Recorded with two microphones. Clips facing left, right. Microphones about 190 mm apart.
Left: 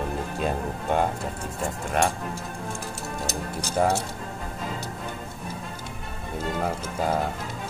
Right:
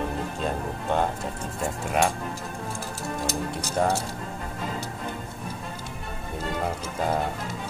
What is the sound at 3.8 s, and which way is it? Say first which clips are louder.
Speech: left 1 dB; 5° left (ahead or behind).